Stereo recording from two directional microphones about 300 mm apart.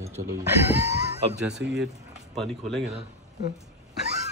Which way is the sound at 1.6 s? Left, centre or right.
Right.